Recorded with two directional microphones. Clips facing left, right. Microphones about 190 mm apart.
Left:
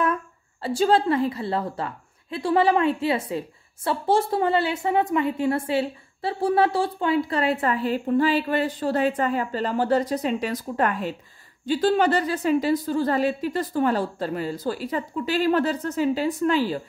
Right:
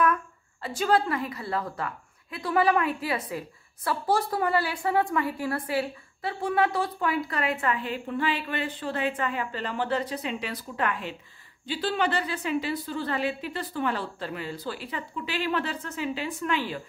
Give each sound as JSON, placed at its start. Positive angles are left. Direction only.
{"t": 0.0, "sound": "a woman's voice", "side_deg": 30}